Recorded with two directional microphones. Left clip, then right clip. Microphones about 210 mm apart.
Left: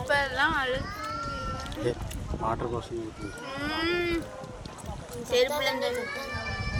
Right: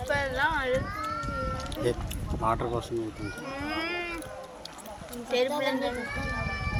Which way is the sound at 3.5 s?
55° left (ahead or behind).